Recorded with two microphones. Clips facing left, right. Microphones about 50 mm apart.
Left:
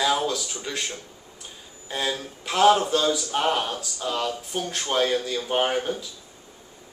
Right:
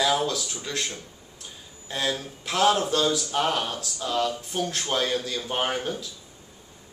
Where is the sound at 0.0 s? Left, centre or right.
Centre.